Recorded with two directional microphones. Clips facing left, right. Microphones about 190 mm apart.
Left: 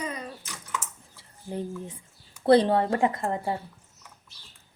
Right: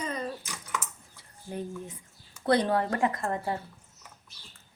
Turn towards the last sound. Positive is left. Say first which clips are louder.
# left 2 dB
turn(degrees=25)  # may be behind; listen again after turning